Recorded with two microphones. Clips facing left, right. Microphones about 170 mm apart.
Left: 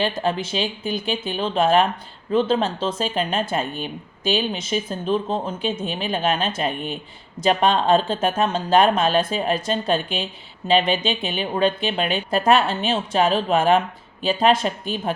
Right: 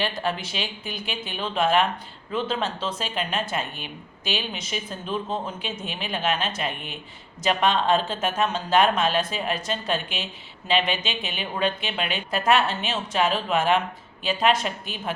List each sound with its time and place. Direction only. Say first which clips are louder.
0.0 s speech: left 5 dB; 25° left (ahead or behind)